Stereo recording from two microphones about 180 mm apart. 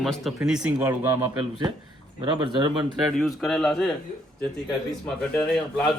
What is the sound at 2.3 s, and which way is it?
Speech, 25° right (ahead or behind).